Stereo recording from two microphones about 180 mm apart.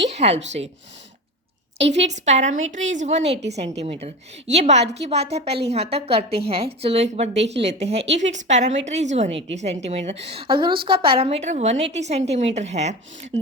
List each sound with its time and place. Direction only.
0.1 s a woman's voice: 35° right (ahead or behind)
1.8 s a woman's voice: 35° right (ahead or behind)